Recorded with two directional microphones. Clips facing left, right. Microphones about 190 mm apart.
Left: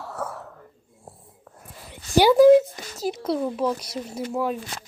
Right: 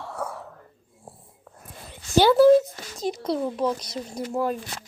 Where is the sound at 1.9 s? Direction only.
15° left (ahead or behind).